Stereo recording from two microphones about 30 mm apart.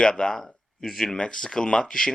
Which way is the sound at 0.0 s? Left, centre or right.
Left.